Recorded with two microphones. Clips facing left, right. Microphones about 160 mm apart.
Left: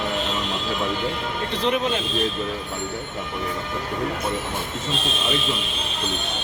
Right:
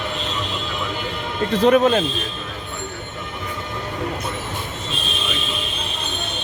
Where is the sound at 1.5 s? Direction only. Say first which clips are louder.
Right 9 dB; 45° right (ahead or behind).